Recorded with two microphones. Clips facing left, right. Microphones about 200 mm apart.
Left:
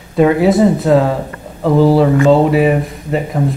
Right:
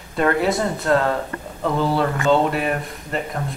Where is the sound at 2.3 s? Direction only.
5° left (ahead or behind).